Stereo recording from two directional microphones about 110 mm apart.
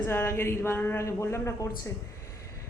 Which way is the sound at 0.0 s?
20° left (ahead or behind).